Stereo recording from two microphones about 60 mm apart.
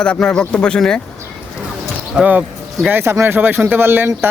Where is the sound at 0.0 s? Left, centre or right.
Centre.